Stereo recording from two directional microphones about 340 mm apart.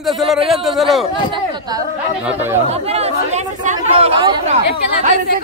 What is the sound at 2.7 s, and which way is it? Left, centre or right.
Speech, centre.